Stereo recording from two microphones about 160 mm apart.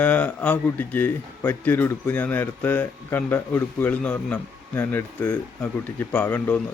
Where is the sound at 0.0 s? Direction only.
10° left (ahead or behind).